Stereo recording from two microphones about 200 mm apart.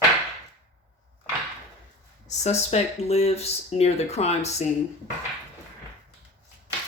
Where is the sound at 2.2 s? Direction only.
35° left (ahead or behind).